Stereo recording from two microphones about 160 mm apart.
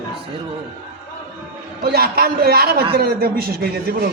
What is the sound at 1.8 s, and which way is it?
A man's voice, 75° right (ahead or behind).